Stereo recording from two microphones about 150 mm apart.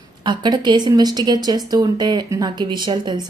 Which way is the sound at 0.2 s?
30° right (ahead or behind).